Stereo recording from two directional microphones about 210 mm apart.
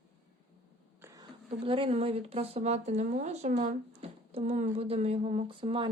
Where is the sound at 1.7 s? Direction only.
25° right (ahead or behind).